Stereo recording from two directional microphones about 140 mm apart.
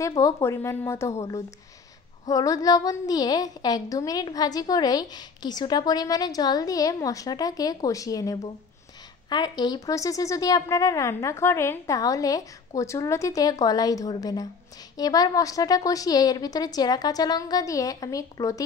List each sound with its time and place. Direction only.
0.2 s speech: 20° left (ahead or behind)